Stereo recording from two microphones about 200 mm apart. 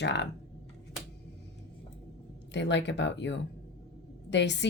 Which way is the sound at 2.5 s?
60° left (ahead or behind).